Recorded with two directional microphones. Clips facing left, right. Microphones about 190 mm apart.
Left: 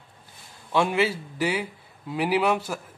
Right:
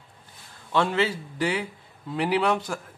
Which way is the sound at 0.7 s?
10° left (ahead or behind).